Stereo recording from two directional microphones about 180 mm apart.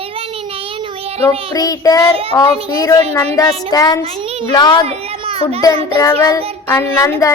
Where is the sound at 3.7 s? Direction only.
20° left (ahead or behind).